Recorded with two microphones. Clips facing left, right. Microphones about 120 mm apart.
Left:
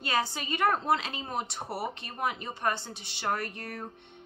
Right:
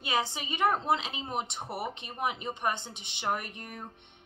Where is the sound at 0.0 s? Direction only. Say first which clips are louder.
Left 1 dB; 20° right (ahead or behind).